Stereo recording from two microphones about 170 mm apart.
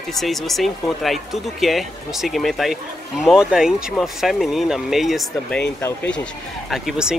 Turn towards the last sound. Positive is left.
turn(degrees=-5)  # may be behind; listen again after turning